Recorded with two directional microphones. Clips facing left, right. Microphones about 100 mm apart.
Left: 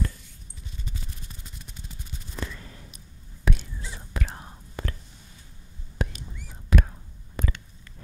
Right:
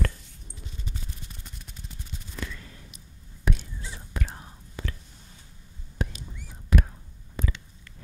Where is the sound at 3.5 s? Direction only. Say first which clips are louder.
Left 1 dB; 90° left.